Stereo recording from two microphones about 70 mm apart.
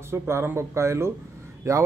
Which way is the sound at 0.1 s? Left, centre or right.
Right.